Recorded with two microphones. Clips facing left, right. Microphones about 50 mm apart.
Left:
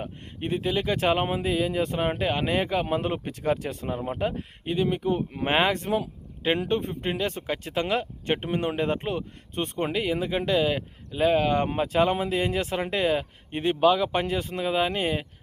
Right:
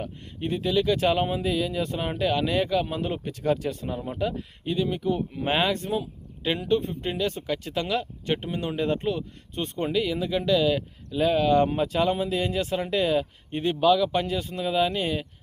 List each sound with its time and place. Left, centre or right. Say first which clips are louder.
0.0 s speech: right 1 dB; left